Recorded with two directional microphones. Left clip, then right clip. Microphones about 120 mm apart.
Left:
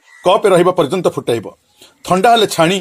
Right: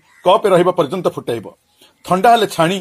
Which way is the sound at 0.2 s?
30° left (ahead or behind).